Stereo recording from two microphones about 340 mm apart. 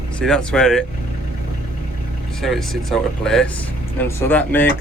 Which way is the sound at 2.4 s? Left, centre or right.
Centre.